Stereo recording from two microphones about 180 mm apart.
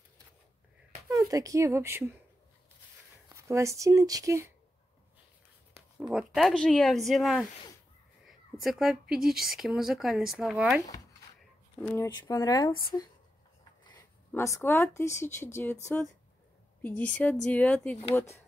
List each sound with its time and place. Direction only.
1.1 s speech: 20° right (ahead or behind)
3.3 s speech: 15° right (ahead or behind)
5.8 s speech: 5° right (ahead or behind)
11.8 s speech: 15° left (ahead or behind)
14.3 s speech: 15° left (ahead or behind)